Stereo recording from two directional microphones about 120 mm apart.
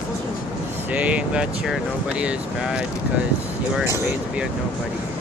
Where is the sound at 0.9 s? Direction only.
10° right (ahead or behind).